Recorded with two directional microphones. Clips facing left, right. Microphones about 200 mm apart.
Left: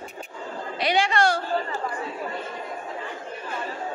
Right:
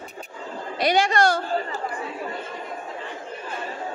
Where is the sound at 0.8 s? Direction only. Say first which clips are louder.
Right 2 dB; 45° right (ahead or behind).